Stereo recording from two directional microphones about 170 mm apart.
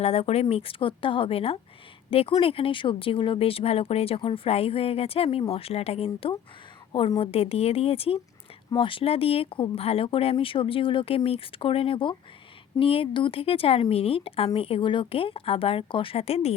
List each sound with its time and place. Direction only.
0.0 s speech: 35° left (ahead or behind)